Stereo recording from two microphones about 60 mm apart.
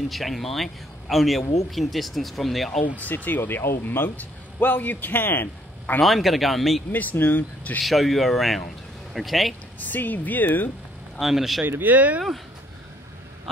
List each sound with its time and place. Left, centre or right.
0.1 s speech: centre
2.8 s speech: left
6.0 s speech: centre
6.9 s speech: left
7.8 s speech: centre
9.8 s speech: left
11.1 s speech: centre
11.6 s speech: right